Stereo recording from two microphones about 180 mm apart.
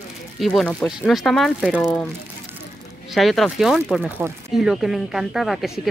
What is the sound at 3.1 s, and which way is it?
Speech, centre (ahead or behind).